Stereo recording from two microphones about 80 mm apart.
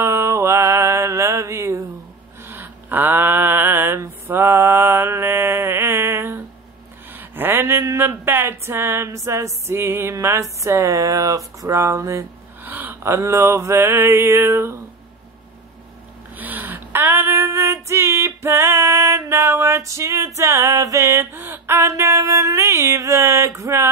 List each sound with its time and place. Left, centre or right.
0.0 s mantra: right
2.4 s a sound: right
10.2 s mantra: right
12.6 s mantra: right
16.3 s female singing: right